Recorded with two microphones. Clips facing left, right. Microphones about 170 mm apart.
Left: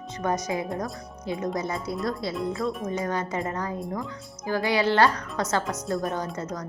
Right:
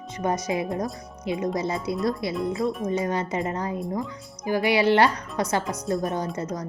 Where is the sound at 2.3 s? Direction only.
Centre (ahead or behind).